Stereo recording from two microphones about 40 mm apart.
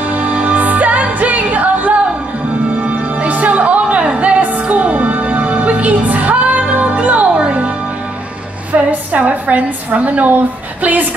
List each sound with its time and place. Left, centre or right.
0.0 s music: right
8.7 s a woman's voice: right